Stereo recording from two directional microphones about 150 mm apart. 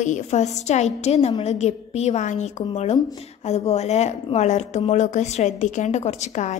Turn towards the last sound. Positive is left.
turn(degrees=50)  # may be behind; listen again after turning